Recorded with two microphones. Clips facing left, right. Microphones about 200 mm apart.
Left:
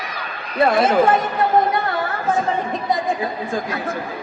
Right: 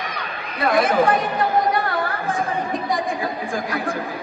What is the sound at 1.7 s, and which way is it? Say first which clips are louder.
Music: left 1 dB; 25° left (ahead or behind).